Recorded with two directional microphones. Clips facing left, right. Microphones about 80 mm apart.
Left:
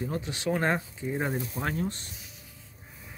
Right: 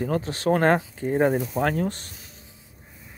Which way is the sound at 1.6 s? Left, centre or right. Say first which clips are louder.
Right 7 dB; right.